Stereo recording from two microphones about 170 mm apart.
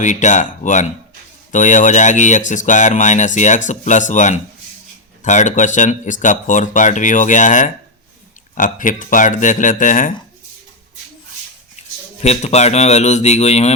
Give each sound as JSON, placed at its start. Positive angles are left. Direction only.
{"t": 0.0, "sound": "speech", "side_deg": 45}
{"t": 11.8, "sound": "a sound", "side_deg": 40}
{"t": 12.2, "sound": "a man's voice", "side_deg": 40}